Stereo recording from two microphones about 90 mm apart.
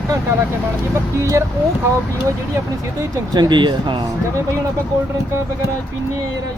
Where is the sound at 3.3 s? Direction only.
60° right (ahead or behind).